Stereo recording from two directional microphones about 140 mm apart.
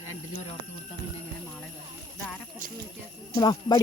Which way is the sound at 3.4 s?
30° left (ahead or behind).